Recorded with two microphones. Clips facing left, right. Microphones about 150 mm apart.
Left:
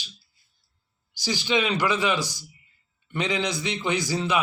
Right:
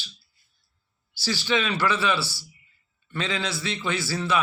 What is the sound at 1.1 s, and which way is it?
Speech, 15° left (ahead or behind).